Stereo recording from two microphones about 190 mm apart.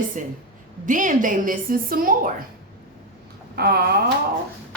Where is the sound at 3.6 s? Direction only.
55° right (ahead or behind).